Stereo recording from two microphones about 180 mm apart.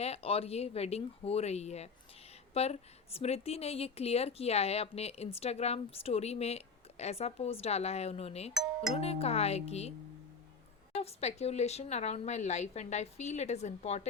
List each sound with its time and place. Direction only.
0.0 s a woman's voice: 35° left (ahead or behind)
8.5 s speech: 5° right (ahead or behind)
9.0 s a woman's voice: 35° left (ahead or behind)
10.9 s a woman's voice: 35° left (ahead or behind)